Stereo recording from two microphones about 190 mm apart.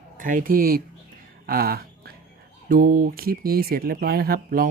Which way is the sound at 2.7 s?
45° right (ahead or behind).